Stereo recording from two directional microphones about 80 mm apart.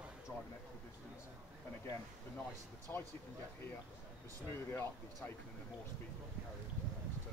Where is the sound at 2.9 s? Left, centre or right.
Left.